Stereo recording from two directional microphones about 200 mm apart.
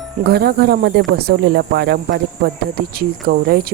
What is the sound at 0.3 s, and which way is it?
Speech, 55° right (ahead or behind).